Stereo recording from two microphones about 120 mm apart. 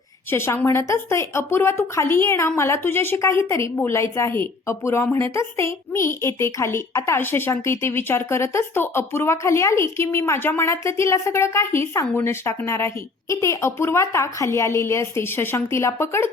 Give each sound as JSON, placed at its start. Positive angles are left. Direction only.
{"t": 0.3, "sound": "a woman's voice", "side_deg": 20}